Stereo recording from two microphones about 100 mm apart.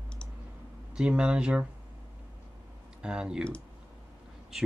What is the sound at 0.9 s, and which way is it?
Speech, 10° right (ahead or behind).